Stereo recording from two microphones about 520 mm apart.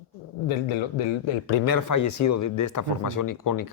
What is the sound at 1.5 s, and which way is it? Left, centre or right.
Speech, left.